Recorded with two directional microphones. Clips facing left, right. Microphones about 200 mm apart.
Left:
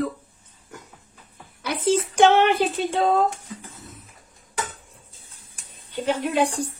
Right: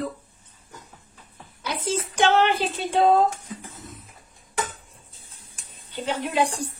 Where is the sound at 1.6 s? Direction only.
60° left (ahead or behind).